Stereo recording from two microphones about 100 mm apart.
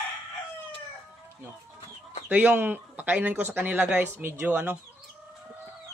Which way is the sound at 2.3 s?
15° right (ahead or behind).